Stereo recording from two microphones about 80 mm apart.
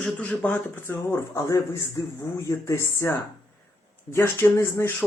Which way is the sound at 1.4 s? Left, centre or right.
Left.